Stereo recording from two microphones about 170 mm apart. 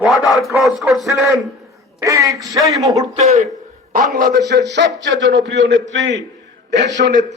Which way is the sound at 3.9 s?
55° right (ahead or behind).